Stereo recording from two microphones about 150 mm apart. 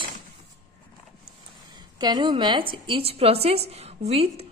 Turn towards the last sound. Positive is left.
turn(degrees=-45)  # may be behind; listen again after turning